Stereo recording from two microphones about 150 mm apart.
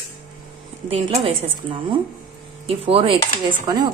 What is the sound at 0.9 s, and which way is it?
Speech, 35° right (ahead or behind).